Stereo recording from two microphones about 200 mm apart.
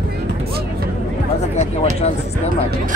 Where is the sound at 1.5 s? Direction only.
35° left (ahead or behind).